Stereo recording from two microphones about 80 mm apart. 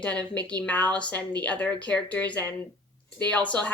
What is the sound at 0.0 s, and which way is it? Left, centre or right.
Speech, centre.